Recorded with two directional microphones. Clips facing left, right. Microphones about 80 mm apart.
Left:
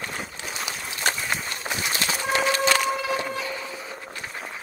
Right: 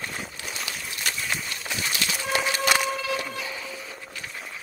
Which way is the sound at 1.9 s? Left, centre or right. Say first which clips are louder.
Left 2 dB; left.